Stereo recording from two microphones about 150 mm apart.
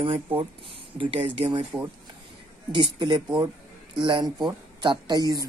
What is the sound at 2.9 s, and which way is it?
Speech, 30° right (ahead or behind).